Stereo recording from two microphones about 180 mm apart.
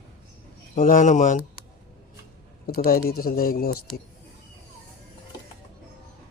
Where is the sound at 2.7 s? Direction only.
55° left (ahead or behind).